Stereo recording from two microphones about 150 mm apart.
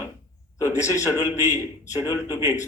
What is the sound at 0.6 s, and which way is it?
Speech, 20° left (ahead or behind).